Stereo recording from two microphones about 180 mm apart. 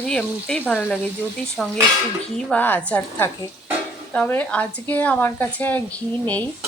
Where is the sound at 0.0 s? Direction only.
5° left (ahead or behind).